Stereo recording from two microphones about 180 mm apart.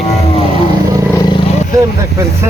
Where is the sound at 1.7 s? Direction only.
15° right (ahead or behind).